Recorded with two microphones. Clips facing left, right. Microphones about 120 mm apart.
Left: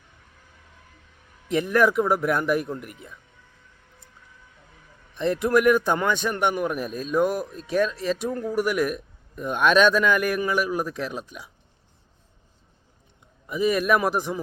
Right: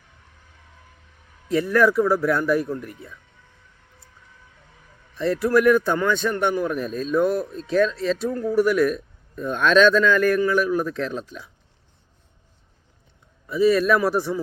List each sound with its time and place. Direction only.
1.5 s a man's voice: 20° left (ahead or behind)
5.1 s a man's voice: 20° left (ahead or behind)
13.5 s a man's voice: 15° left (ahead or behind)